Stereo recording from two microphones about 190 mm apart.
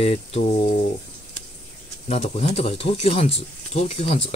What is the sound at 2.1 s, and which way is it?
Speech, 35° left (ahead or behind).